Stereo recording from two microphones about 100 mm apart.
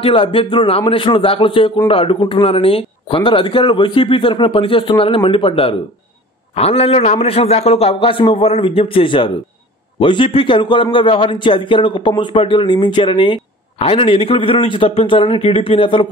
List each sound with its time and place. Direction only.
0.0 s a man's voice: 65° left (ahead or behind)
6.5 s a man's voice: 80° left; by 16.1 s 60° left (ahead or behind)